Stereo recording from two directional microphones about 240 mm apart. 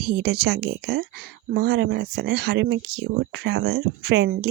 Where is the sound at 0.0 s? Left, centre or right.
Right.